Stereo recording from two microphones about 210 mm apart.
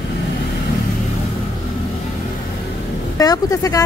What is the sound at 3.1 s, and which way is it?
Speech, 15° left (ahead or behind).